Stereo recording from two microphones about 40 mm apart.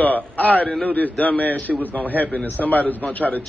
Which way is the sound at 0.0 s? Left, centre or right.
Left.